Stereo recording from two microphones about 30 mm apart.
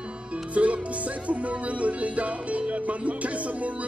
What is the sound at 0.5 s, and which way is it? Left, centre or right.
Music, right.